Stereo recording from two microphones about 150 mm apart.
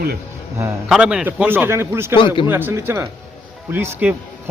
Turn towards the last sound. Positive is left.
turn(degrees=-15)  # may be behind; listen again after turning